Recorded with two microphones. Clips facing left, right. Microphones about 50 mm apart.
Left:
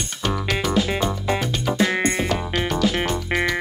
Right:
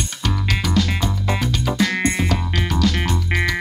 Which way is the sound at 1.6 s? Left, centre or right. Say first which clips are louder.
Even; centre.